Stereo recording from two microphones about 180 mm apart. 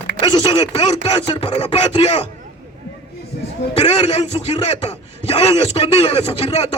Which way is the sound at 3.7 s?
30° left (ahead or behind).